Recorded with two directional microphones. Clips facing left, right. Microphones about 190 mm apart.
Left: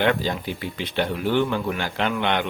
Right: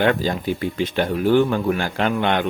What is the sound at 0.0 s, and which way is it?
Speech, 45° right (ahead or behind).